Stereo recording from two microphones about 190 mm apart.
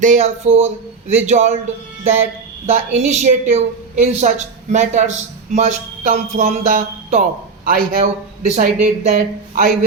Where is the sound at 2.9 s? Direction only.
35° right (ahead or behind).